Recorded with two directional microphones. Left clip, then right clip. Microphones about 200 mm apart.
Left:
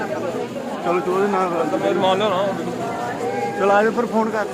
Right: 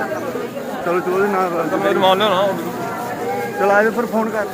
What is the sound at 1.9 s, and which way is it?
Speech, 45° right (ahead or behind).